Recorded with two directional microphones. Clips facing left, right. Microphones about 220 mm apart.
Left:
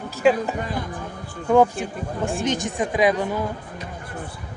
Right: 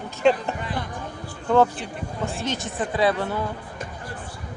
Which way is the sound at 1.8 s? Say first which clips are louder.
Left 6 dB; 45° left (ahead or behind).